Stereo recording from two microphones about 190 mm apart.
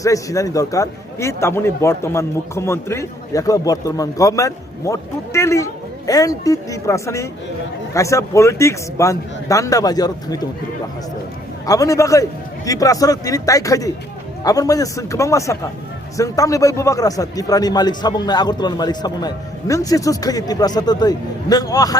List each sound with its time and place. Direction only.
0.0 s a man's voice: 15° left (ahead or behind)
11.6 s a man's voice: 20° left (ahead or behind)